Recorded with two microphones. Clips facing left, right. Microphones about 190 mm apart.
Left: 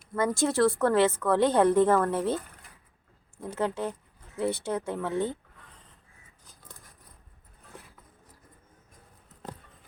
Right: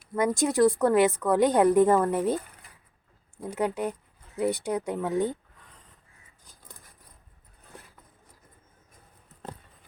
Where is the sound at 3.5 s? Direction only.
15° right (ahead or behind).